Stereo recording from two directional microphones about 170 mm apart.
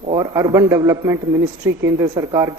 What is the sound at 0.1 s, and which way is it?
A woman's voice, 25° right (ahead or behind).